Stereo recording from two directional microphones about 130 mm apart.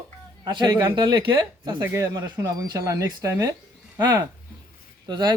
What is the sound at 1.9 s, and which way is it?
Speech, 25° right (ahead or behind).